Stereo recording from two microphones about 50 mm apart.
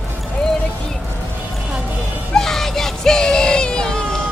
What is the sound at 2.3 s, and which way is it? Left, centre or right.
Music, centre.